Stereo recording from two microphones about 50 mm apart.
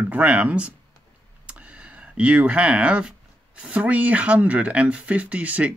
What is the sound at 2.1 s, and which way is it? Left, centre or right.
Speech, right.